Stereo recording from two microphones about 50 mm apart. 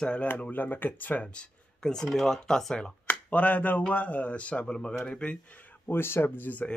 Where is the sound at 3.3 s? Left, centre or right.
Left.